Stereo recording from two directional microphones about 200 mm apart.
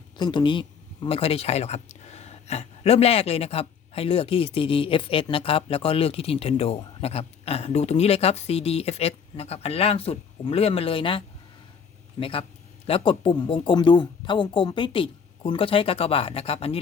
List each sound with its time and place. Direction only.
0.2 s speech: 20° left (ahead or behind)
12.2 s speech: 30° left (ahead or behind)